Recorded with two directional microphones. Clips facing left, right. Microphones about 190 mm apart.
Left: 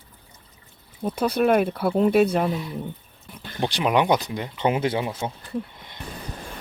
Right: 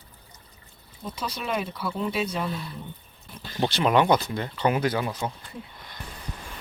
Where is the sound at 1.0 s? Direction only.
60° left (ahead or behind).